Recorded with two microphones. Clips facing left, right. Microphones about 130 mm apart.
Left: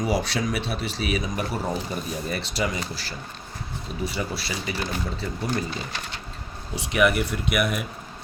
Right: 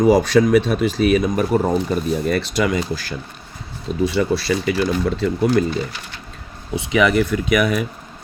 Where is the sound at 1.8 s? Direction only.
70° right (ahead or behind).